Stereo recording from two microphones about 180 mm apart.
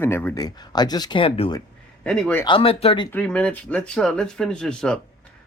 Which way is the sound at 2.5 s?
30° left (ahead or behind).